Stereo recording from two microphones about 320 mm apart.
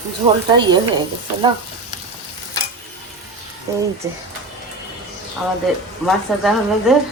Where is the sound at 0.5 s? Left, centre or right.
Centre.